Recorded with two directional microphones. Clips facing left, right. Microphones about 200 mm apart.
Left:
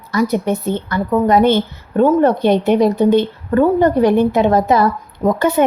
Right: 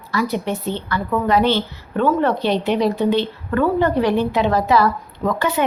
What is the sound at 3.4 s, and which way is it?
Speech, 35° left (ahead or behind).